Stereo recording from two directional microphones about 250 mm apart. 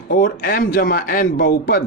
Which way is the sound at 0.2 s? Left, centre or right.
Left.